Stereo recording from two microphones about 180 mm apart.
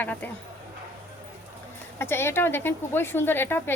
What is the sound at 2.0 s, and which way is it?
A woman's voice, 15° left (ahead or behind).